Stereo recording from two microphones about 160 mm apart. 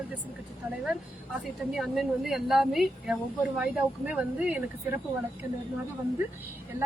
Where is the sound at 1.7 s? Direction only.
Centre (ahead or behind).